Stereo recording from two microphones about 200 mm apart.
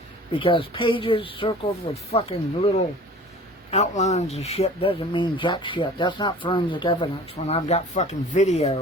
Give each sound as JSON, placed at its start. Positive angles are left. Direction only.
{"t": 0.3, "sound": "speech", "side_deg": 25}
{"t": 3.7, "sound": "speech", "side_deg": 35}